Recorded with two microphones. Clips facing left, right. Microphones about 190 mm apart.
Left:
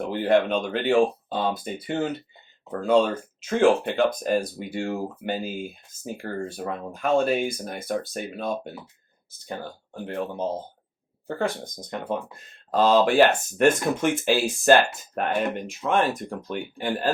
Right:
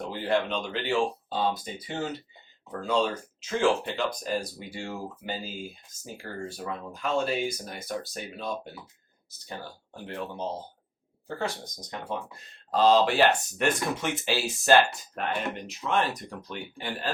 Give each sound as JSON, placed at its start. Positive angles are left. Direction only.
{"t": 0.0, "sound": "speech", "side_deg": 55}